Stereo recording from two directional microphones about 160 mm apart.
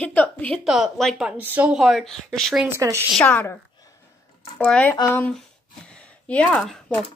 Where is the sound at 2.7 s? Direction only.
15° right (ahead or behind).